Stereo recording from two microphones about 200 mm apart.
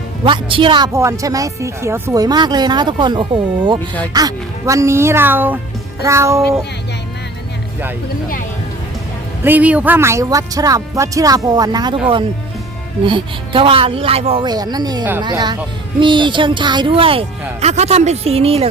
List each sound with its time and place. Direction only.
0.3 s speech: 25° right (ahead or behind)
9.4 s speech: 10° right (ahead or behind); by 18.7 s 30° right (ahead or behind)